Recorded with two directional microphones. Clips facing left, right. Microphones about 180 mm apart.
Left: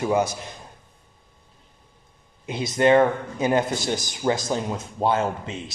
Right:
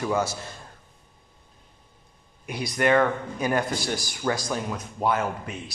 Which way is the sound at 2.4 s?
25° left (ahead or behind).